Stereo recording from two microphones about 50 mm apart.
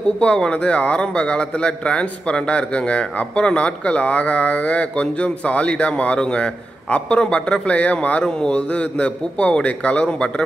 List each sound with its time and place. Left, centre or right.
0.2 s a man's voice: centre
8.2 s a man's voice: centre